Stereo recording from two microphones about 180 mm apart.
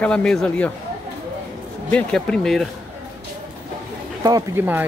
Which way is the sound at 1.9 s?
5° left (ahead or behind).